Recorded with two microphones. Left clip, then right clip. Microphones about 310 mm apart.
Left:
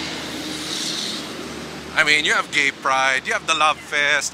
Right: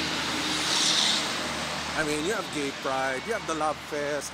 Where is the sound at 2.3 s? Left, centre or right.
Left.